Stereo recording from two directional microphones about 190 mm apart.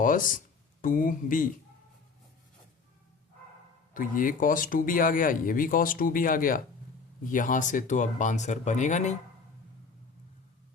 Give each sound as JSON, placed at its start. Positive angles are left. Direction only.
{"t": 0.0, "sound": "speech", "side_deg": 45}
{"t": 3.9, "sound": "speech", "side_deg": 45}